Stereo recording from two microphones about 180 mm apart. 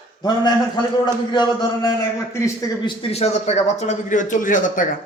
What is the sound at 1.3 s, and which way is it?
Speech, 25° left (ahead or behind).